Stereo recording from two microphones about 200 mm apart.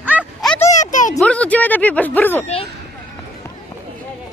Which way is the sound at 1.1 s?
5° left (ahead or behind).